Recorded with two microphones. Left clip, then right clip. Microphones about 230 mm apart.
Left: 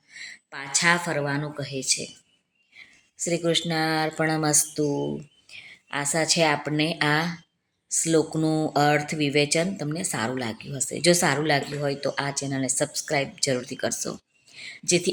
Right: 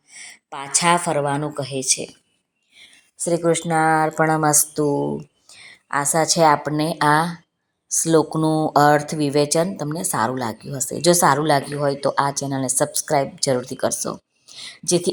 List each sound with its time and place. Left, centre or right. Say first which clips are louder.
0.1 s a woman's voice: right 3 dB; centre
3.2 s a woman's voice: right 5 dB; centre
13.8 s a sound: right 6 dB; centre